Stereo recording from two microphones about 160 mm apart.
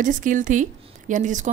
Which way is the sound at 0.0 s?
55° right (ahead or behind).